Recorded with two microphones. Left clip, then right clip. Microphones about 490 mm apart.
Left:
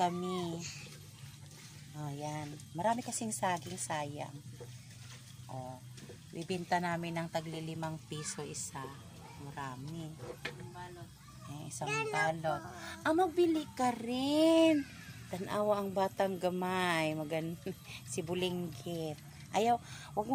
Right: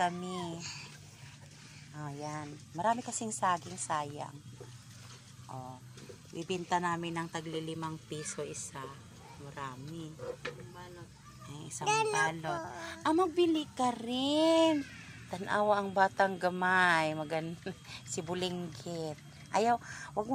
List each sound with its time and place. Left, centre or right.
0.0 s a man's voice: right
0.6 s a child's voice: right
2.0 s a woman's voice: right
6.3 s a woman's voice: right
11.8 s a child's voice: right
12.3 s a woman's voice: right